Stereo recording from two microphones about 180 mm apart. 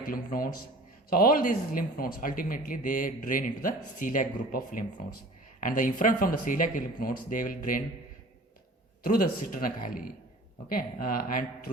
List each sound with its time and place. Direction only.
0.0 s speech: 50° left (ahead or behind)
9.0 s speech: 50° left (ahead or behind)